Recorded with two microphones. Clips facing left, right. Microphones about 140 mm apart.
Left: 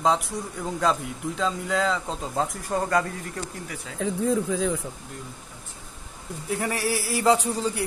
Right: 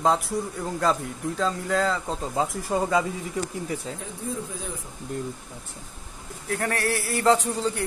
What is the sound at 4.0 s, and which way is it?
Speech, 90° left.